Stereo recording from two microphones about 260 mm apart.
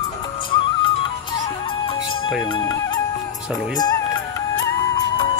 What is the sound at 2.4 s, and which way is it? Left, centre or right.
Speech, centre.